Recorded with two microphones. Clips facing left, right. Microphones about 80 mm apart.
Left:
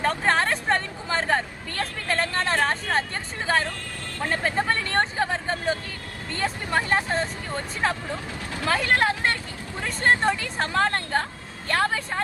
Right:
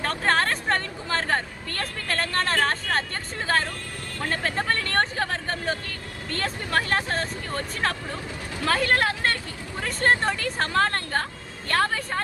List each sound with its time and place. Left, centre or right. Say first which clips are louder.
0.0 s vehicle: left 1 dB; centre
4.3 s speech: left 2 dB; centre